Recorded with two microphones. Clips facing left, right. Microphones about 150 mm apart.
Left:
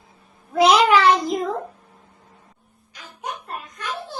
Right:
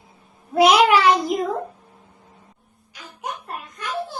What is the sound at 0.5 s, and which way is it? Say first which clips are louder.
Child singing: right 1 dB; 10° right (ahead or behind).